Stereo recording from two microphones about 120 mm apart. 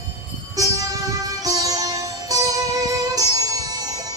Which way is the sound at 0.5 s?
30° right (ahead or behind).